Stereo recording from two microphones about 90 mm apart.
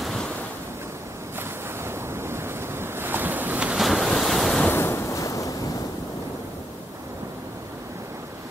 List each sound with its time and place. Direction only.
0.0 s waves: centre (ahead or behind)
1.9 s waves: 30° right (ahead or behind); by 3.8 s 10° right (ahead or behind)
3.8 s waves: centre (ahead or behind)
4.6 s waves: 25° left (ahead or behind)